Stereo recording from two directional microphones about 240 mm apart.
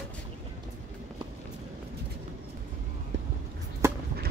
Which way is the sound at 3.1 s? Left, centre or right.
Right.